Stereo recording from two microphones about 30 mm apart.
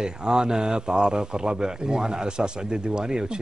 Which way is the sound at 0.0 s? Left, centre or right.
Right.